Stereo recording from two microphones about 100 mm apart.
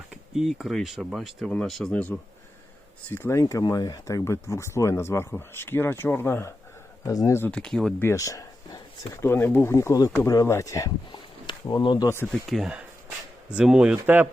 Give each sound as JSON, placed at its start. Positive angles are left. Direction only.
{"t": 0.1, "sound": "speech", "side_deg": -5}
{"t": 3.1, "sound": "speech", "side_deg": 25}
{"t": 7.0, "sound": "speech", "side_deg": 35}
{"t": 7.4, "sound": "speech", "side_deg": 10}
{"t": 8.1, "sound": "a sound", "side_deg": 35}
{"t": 9.2, "sound": "speech", "side_deg": 20}
{"t": 11.1, "sound": "a sound", "side_deg": 50}
{"t": 12.0, "sound": "speech", "side_deg": 25}
{"t": 12.3, "sound": "speech", "side_deg": 0}
{"t": 12.7, "sound": "a sound", "side_deg": -10}
{"t": 13.9, "sound": "speech", "side_deg": -20}